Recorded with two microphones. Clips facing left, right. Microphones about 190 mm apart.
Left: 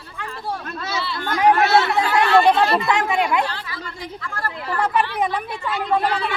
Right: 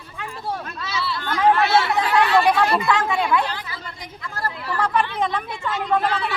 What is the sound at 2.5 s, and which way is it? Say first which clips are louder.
Speech: left 1 dB; 15° left (ahead or behind).